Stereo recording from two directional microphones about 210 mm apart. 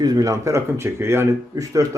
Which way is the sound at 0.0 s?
15° right (ahead or behind).